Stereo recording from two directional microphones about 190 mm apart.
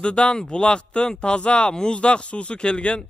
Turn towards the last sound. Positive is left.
turn(degrees=5)  # may be behind; listen again after turning